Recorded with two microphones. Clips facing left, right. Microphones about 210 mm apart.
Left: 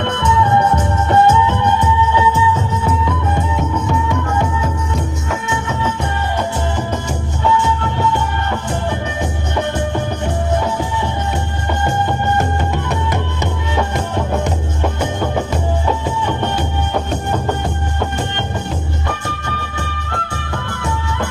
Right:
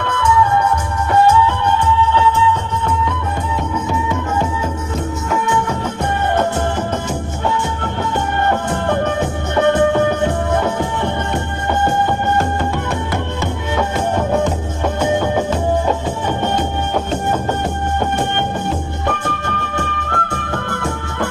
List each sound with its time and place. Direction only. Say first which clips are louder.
0.0 s music: even; 25° left (ahead or behind)
2.0 s music: even; 10° left (ahead or behind)
5.8 s music: right 1 dB; 55° right (ahead or behind)
8.4 s music: right 3 dB; 55° right (ahead or behind)
19.1 s music: right 3 dB; 55° right (ahead or behind)